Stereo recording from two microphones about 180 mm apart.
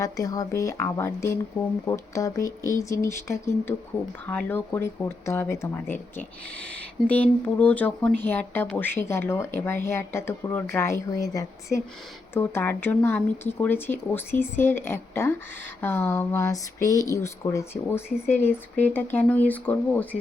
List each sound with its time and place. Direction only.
0.0 s speech: 20° left (ahead or behind)